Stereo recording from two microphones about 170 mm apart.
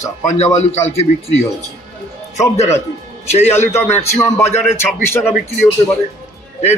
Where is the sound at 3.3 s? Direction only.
40° left (ahead or behind).